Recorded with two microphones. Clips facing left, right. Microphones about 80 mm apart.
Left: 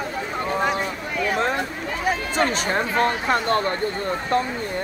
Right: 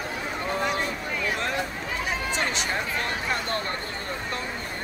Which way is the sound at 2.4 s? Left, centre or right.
Left.